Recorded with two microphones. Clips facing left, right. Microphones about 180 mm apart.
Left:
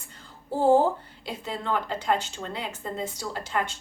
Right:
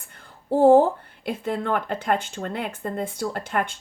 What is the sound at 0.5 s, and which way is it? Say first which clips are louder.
Speech: right 5 dB; 55° right (ahead or behind).